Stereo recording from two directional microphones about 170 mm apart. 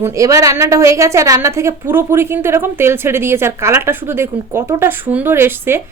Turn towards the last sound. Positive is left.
turn(degrees=-15)  # may be behind; listen again after turning